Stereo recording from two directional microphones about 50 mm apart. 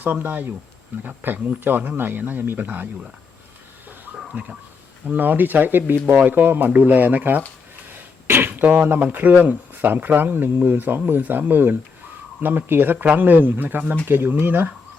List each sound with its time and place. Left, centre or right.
0.0 s speech: right
4.4 s speech: right
7.9 s a sound: right
9.4 s speech: right